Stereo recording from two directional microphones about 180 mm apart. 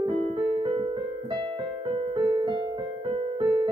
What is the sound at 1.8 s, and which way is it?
Music, 30° right (ahead or behind).